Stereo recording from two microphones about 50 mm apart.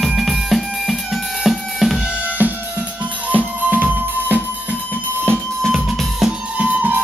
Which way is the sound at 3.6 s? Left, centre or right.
Right.